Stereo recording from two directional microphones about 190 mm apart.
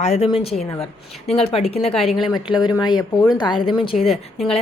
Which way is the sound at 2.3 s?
20° left (ahead or behind).